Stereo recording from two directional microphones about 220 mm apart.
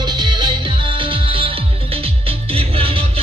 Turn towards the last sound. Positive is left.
turn(degrees=-25)  # may be behind; listen again after turning